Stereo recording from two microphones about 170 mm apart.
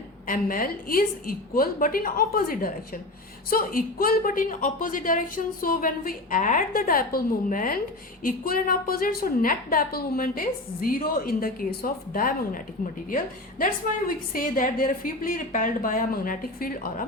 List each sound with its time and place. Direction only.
0.3 s a woman's voice: 55° left (ahead or behind)